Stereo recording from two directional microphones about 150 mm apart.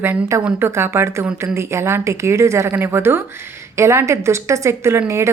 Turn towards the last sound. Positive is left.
turn(degrees=-20)  # may be behind; listen again after turning